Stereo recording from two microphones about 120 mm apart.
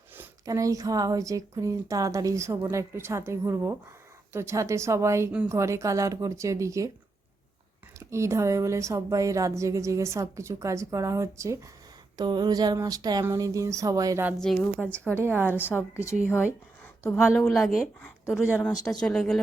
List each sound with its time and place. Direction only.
0.4 s a woman's voice: 30° right (ahead or behind)
7.9 s a woman's voice: 25° right (ahead or behind)
12.1 s a sound: 35° right (ahead or behind)
13.2 s a woman's voice: 30° right (ahead or behind)
14.3 s speech: 5° left (ahead or behind)
15.1 s a woman's voice: 20° right (ahead or behind)
15.5 s a woman's voice: 15° left (ahead or behind)
17.2 s a woman's voice: 5° right (ahead or behind)